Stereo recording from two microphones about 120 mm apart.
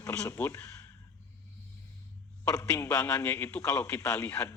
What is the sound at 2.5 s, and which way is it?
Speech, 20° left (ahead or behind).